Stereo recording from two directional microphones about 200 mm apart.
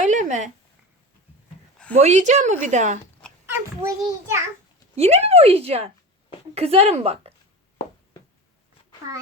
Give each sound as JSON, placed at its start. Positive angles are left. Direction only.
{"t": 0.0, "sound": "a sound", "side_deg": -40}
{"t": 2.0, "sound": "a woman's voice", "side_deg": -35}
{"t": 3.5, "sound": "a child's voice", "side_deg": -10}
{"t": 4.9, "sound": "a woman's voice", "side_deg": -30}